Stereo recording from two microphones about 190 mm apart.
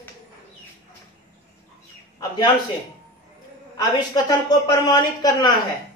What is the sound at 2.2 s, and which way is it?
Speech, 20° left (ahead or behind).